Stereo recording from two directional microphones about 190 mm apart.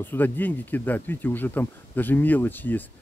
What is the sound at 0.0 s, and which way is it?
Speech, 10° left (ahead or behind).